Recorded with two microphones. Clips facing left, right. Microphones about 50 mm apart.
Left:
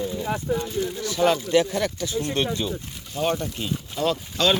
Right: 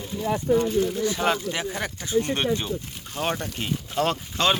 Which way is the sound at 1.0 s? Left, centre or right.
Right.